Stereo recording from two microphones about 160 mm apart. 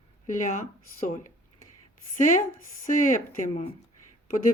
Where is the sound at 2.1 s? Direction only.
55° left (ahead or behind).